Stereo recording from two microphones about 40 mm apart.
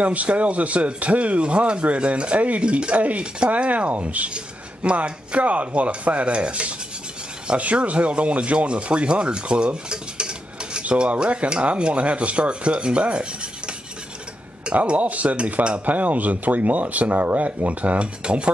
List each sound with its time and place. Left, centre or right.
0.0 s speech: right
14.7 s speech: right